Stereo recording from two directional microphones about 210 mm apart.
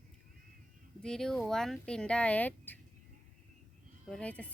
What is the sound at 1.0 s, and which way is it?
A woman's voice, 5° left (ahead or behind).